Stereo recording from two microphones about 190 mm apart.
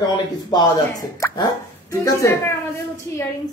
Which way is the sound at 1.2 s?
20° left (ahead or behind).